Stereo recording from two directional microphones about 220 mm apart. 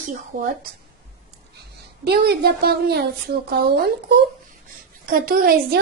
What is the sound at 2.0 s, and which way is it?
A woman's voice, 45° right (ahead or behind).